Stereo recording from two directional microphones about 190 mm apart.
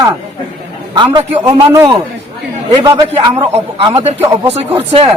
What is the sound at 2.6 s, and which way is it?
Speech, 20° right (ahead or behind).